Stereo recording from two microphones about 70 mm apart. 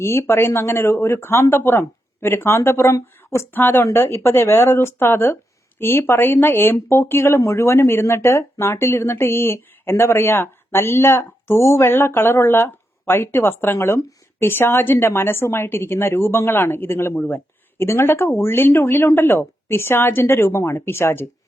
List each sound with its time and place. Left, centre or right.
0.0 s speech: left